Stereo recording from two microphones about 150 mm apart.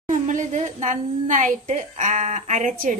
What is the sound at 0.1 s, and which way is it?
A woman's voice, 60° right (ahead or behind).